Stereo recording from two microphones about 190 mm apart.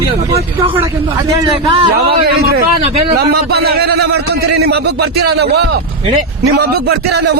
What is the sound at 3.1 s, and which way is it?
A man's voice, 55° right (ahead or behind).